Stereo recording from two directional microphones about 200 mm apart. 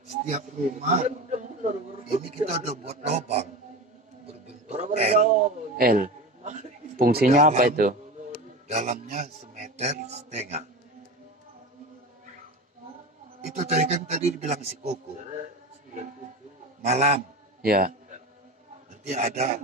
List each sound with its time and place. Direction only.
0.3 s a man's voice: 35° right (ahead or behind)
4.6 s a sound: 35° right (ahead or behind)
13.4 s a man's voice: 35° right (ahead or behind)
16.8 s a man's voice: 35° right (ahead or behind)
17.6 s a man's voice: 45° right (ahead or behind)
19.0 s a man's voice: 35° right (ahead or behind)